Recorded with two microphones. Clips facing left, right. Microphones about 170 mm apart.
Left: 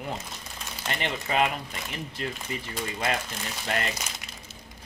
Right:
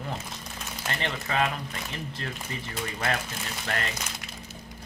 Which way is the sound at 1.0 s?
15° left (ahead or behind).